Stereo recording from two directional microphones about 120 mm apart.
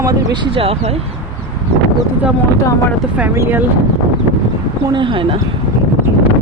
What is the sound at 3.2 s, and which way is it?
Speech, 15° right (ahead or behind).